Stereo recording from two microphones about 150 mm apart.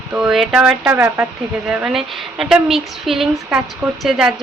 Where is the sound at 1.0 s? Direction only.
20° right (ahead or behind).